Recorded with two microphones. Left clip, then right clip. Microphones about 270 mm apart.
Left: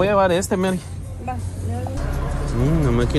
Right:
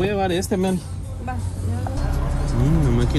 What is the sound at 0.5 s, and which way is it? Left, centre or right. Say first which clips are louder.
Speech: left 1 dB; centre.